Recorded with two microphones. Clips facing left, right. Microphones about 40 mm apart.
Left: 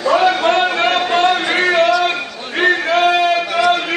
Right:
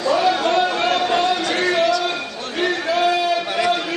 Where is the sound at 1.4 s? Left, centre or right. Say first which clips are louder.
Left 4 dB; left.